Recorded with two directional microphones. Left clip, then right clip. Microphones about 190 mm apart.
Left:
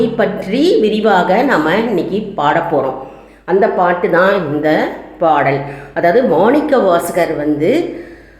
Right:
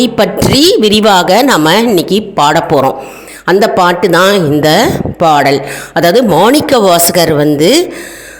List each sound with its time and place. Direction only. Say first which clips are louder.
0.2 s speech: right 6 dB; 60° right (ahead or behind)